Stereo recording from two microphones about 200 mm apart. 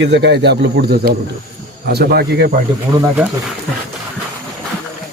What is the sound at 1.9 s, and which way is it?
Speech, 55° right (ahead or behind).